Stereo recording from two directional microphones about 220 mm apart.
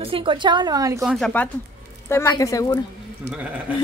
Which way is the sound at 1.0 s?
Centre (ahead or behind).